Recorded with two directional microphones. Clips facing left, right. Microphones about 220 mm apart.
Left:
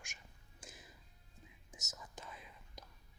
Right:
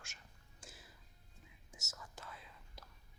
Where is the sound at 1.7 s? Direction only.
15° left (ahead or behind).